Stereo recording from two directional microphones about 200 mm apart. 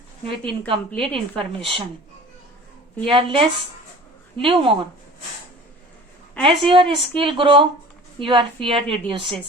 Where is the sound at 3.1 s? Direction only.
25° right (ahead or behind).